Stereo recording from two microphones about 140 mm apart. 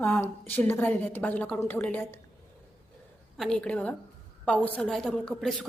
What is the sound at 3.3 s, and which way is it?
A woman's voice, 5° left (ahead or behind).